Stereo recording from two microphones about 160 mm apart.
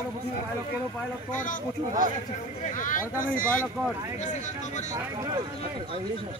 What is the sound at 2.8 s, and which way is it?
Speech, 55° left (ahead or behind).